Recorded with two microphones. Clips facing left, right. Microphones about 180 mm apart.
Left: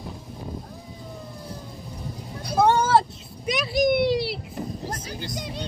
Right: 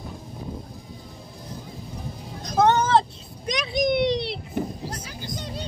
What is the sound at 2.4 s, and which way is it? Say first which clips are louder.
Vehicle: even; 10° left (ahead or behind).